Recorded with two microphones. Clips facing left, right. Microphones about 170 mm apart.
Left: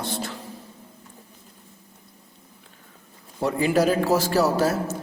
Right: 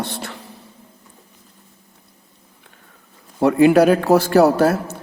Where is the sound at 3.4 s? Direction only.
65° right (ahead or behind).